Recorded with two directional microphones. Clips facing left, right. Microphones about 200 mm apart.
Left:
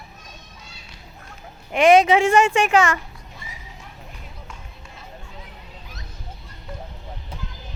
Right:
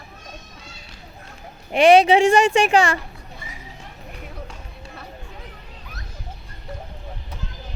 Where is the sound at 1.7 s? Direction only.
30° right (ahead or behind).